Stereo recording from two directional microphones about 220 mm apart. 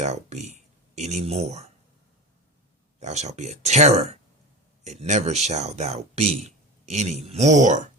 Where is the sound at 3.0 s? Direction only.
30° right (ahead or behind).